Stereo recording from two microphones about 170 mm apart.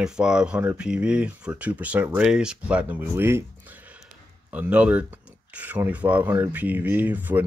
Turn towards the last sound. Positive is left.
turn(degrees=-10)  # may be behind; listen again after turning